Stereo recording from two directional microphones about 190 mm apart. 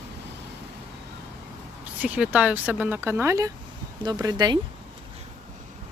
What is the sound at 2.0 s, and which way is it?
Speech, 5° right (ahead or behind).